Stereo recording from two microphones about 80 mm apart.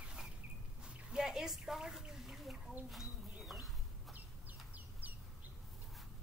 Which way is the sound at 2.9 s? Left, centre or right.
Centre.